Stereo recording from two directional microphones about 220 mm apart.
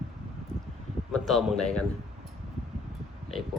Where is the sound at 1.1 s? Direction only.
Centre (ahead or behind).